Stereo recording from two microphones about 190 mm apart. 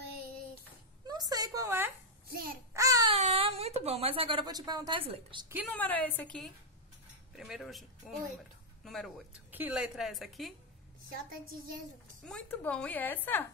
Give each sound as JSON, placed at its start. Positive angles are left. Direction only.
{"t": 1.0, "sound": "a sound", "side_deg": -20}
{"t": 2.7, "sound": "baby cry", "side_deg": -15}
{"t": 3.2, "sound": "a woman's voice", "side_deg": -30}
{"t": 5.7, "sound": "a woman's voice", "side_deg": 10}
{"t": 12.2, "sound": "a woman's voice", "side_deg": 5}